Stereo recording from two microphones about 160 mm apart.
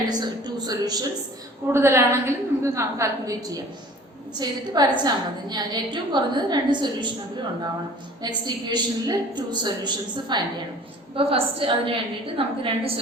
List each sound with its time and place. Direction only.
0.1 s a sound: 25° right (ahead or behind)
1.7 s a woman's voice: 15° right (ahead or behind)
8.4 s a woman's voice: 25° right (ahead or behind)